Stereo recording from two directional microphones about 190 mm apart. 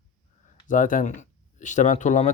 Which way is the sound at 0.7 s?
45° left (ahead or behind).